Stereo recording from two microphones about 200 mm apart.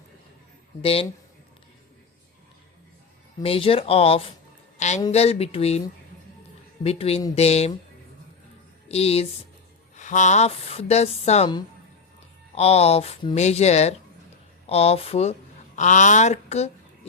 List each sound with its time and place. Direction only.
0.8 s speech: 30° left (ahead or behind)
3.4 s speech: 30° left (ahead or behind)
6.8 s speech: 30° left (ahead or behind)
8.9 s speech: 30° left (ahead or behind)
12.5 s speech: 30° left (ahead or behind)